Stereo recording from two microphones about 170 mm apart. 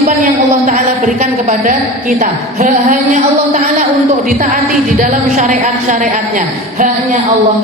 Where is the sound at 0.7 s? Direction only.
45° right (ahead or behind).